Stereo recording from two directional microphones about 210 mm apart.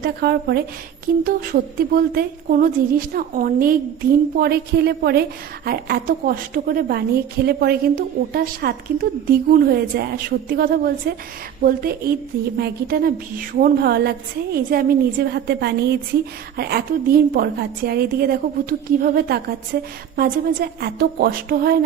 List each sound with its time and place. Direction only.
0.0 s a woman's voice: 50° right (ahead or behind)